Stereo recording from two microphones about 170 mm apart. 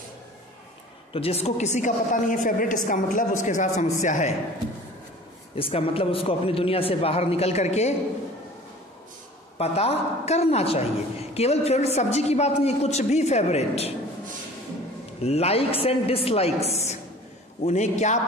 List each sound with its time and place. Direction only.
1.1 s a woman's voice: 35° left (ahead or behind)
5.6 s a woman's voice: 35° left (ahead or behind)
9.6 s a woman's voice: 40° left (ahead or behind)
15.2 s a woman's voice: 35° left (ahead or behind)